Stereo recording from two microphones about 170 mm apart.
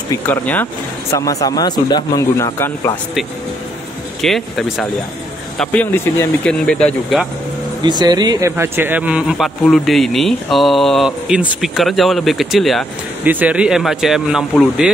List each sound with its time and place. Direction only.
0.1 s speech: 10° left (ahead or behind)
4.2 s a man's voice: centre (ahead or behind)
7.8 s a man's voice: 25° right (ahead or behind); by 14.4 s centre (ahead or behind)